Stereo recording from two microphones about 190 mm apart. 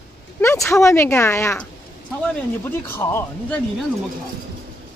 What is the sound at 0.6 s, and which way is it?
Speech, 15° left (ahead or behind).